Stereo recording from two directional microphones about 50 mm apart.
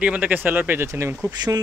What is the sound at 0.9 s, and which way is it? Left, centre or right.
Speech, right.